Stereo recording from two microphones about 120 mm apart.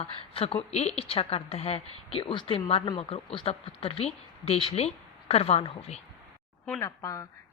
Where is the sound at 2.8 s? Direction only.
35° left (ahead or behind).